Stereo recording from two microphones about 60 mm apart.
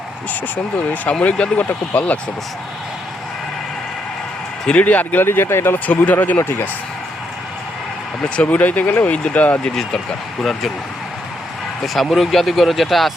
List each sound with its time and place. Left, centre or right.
1.2 s speech: left
4.6 s speech: centre
5.2 s speech: left
6.1 s speech: left
8.4 s speech: left
9.6 s speech: centre
11.8 s speech: centre